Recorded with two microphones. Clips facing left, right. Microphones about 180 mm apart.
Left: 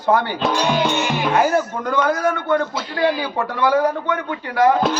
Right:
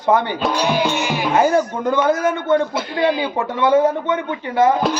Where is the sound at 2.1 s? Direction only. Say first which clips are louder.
Right 2 dB; 25° right (ahead or behind).